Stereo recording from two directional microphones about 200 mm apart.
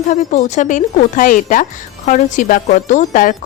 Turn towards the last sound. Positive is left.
turn(degrees=40)  # may be behind; listen again after turning